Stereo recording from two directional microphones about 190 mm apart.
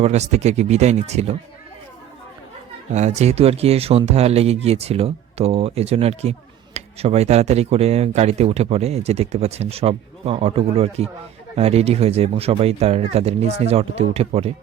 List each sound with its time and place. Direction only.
0.0 s speech: 35° right (ahead or behind)
3.2 s speech: 35° right (ahead or behind)